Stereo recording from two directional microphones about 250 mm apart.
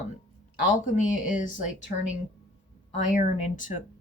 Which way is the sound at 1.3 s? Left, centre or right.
Left.